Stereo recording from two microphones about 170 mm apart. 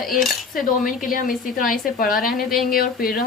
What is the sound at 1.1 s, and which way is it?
A woman's voice, 55° left (ahead or behind).